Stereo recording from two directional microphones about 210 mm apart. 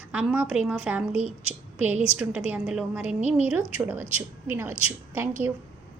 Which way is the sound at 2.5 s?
5° right (ahead or behind).